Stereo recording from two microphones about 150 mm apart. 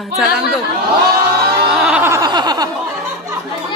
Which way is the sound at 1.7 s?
5° right (ahead or behind).